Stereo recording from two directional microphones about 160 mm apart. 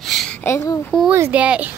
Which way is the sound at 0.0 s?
Centre (ahead or behind).